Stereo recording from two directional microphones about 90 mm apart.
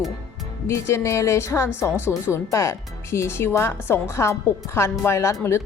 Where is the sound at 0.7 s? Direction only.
30° left (ahead or behind).